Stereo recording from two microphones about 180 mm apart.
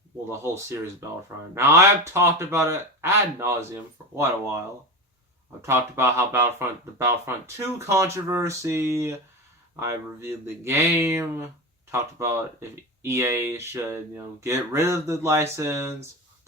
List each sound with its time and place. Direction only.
0.3 s speech: 15° right (ahead or behind)
5.6 s speech: 15° right (ahead or behind)